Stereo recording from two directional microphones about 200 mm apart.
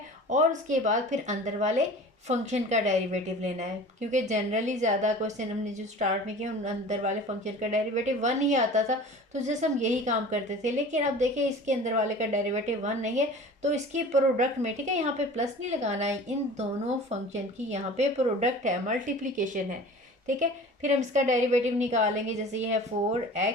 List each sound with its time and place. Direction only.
0.3 s speech: 35° right (ahead or behind)